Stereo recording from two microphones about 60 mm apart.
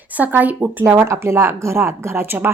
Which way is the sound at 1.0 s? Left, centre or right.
Right.